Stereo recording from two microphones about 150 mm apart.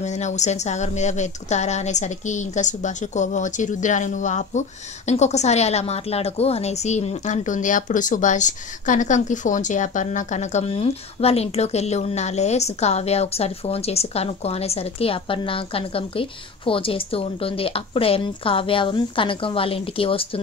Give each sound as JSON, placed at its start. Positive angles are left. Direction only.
{"t": 0.0, "sound": "a woman's voice", "side_deg": 50}